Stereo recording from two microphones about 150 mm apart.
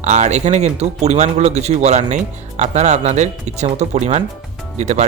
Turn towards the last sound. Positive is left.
turn(degrees=-50)  # may be behind; listen again after turning